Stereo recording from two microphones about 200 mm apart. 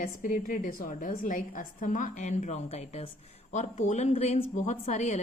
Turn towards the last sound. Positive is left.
turn(degrees=35)  # may be behind; listen again after turning